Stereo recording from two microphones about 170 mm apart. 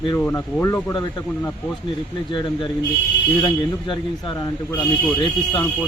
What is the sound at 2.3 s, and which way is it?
Speech, 30° left (ahead or behind).